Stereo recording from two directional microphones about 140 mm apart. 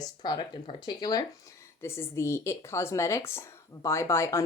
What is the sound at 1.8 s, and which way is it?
Speech, 20° left (ahead or behind).